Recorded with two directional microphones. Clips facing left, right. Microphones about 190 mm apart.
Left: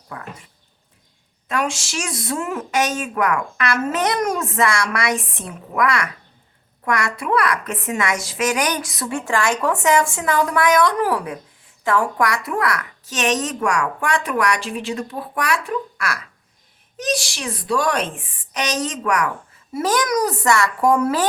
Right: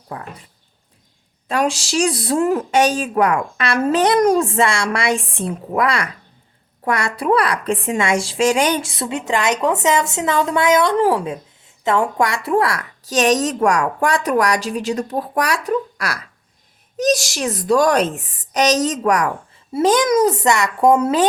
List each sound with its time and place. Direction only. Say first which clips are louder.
0.1 s a woman's voice: right 3 dB; 30° right (ahead or behind)
1.5 s a woman's voice: right 4 dB; 35° right (ahead or behind)
19.7 s a woman's voice: right 5 dB; 20° right (ahead or behind)